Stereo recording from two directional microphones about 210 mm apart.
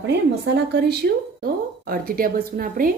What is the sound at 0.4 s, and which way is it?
A woman's voice, 55° right (ahead or behind).